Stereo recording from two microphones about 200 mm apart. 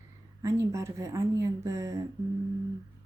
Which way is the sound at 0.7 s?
15° right (ahead or behind).